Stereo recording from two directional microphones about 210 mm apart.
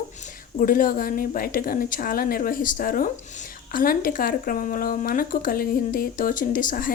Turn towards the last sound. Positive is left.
turn(degrees=40)  # may be behind; listen again after turning